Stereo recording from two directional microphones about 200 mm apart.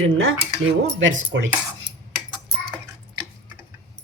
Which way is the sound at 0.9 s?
70° right (ahead or behind).